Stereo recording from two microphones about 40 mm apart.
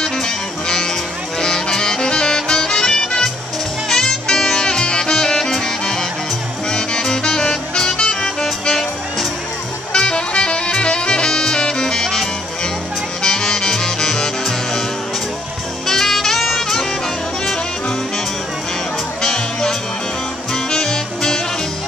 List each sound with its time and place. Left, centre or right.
0.0 s music: centre
9.9 s music: left
15.9 s saxophone: centre
17.5 s music: centre
19.2 s music: centre